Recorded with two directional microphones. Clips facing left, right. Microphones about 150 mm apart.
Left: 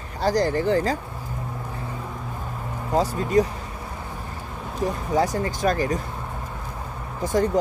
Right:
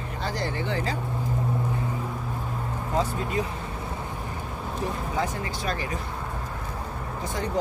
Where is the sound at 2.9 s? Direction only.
40° left (ahead or behind).